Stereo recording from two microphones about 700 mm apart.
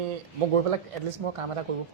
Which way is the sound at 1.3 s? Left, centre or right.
Right.